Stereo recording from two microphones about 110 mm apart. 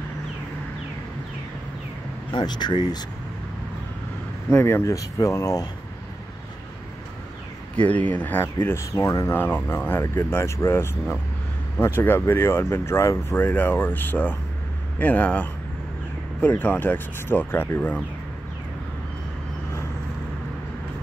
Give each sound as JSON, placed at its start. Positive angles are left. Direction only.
{"t": 2.3, "sound": "speech", "side_deg": 40}
{"t": 4.5, "sound": "speech", "side_deg": 20}
{"t": 7.7, "sound": "speech", "side_deg": 15}